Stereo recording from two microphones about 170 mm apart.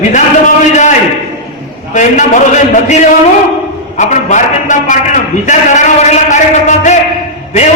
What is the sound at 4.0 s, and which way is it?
A man's voice, 45° left (ahead or behind).